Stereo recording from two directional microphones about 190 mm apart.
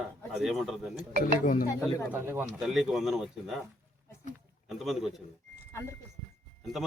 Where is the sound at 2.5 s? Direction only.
Centre (ahead or behind).